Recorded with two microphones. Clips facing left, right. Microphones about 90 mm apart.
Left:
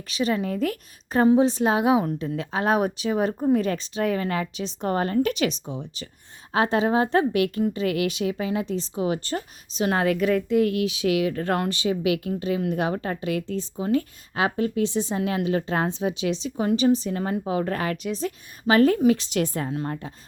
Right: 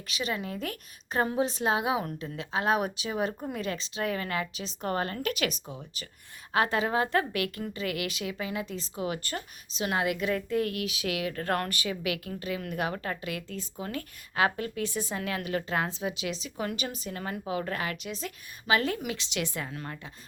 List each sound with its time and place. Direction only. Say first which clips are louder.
0.1 s a woman's voice: left 8 dB; 35° left (ahead or behind)